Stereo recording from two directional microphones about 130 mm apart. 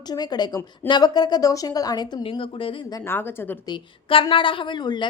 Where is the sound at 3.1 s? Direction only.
15° left (ahead or behind).